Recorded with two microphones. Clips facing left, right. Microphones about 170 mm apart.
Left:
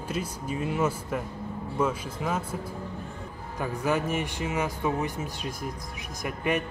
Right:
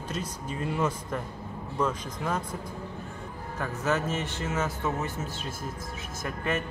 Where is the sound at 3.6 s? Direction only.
15° left (ahead or behind).